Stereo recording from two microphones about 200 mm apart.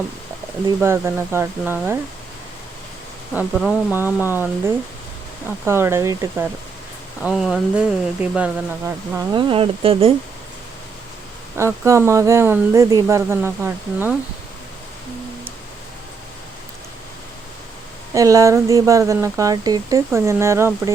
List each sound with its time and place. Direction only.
0.8 s speech: 10° right (ahead or behind)
3.3 s speech: centre (ahead or behind)
7.2 s speech: 5° right (ahead or behind)
9.3 s speech: 25° right (ahead or behind)
11.5 s speech: 15° right (ahead or behind)
18.1 s speech: 15° right (ahead or behind)